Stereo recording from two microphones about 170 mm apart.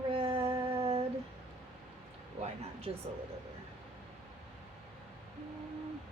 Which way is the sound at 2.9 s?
35° right (ahead or behind).